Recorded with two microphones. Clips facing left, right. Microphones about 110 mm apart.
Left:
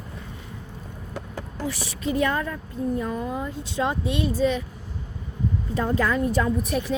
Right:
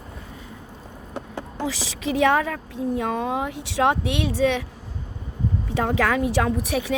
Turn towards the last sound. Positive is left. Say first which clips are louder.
# right 1 dB
turn(degrees=-85)